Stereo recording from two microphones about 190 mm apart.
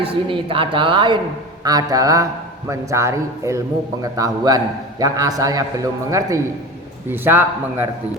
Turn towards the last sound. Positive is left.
turn(degrees=-10)  # may be behind; listen again after turning